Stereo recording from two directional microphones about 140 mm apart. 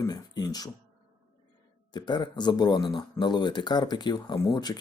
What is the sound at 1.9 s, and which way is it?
Speech, 30° left (ahead or behind).